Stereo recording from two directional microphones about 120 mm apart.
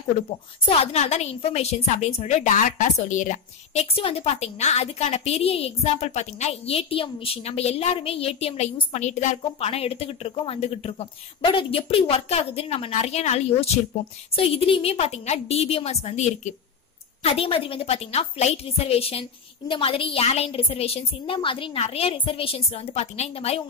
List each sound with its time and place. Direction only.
0.7 s a woman's voice: 60° left (ahead or behind); by 3.8 s 90° left
3.8 s a woman's voice: 50° left (ahead or behind); by 16.5 s 70° left (ahead or behind)
17.2 s a woman's voice: 55° left (ahead or behind)